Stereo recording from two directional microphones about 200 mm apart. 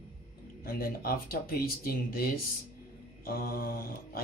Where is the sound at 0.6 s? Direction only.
45° left (ahead or behind).